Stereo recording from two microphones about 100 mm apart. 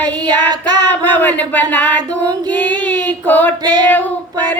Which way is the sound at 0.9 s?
20° left (ahead or behind).